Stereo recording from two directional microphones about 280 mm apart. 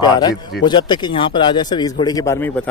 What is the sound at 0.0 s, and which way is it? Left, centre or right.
A man's voice, centre.